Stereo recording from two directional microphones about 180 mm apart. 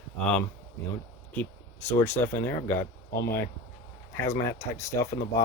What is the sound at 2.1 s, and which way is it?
Speech, 15° left (ahead or behind).